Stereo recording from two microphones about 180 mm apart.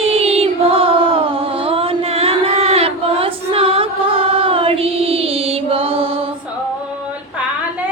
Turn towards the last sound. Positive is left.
turn(degrees=-30)  # may be behind; listen again after turning